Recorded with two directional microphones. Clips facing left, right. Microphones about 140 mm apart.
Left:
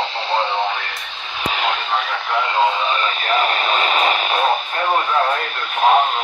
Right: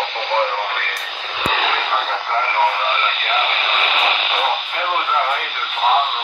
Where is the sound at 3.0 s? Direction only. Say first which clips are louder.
Left 2 dB; 40° left (ahead or behind).